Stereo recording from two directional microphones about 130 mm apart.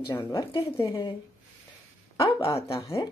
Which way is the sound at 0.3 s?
30° left (ahead or behind).